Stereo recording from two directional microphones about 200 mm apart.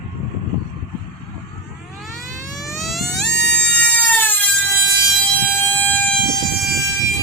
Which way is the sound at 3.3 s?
55° left (ahead or behind).